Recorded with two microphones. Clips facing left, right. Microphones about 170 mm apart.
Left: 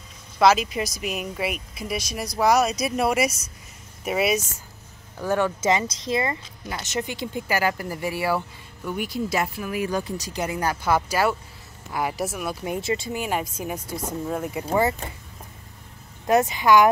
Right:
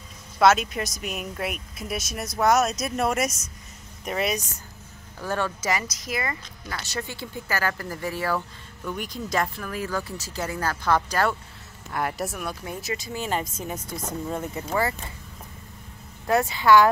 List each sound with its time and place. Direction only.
0.4 s speech: centre (ahead or behind)
12.6 s speech: 25° left (ahead or behind)
13.1 s speech: 10° left (ahead or behind)
16.3 s speech: 20° left (ahead or behind)